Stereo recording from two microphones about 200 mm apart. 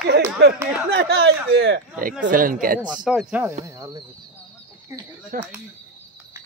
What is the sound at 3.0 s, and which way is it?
Speech, 5° right (ahead or behind).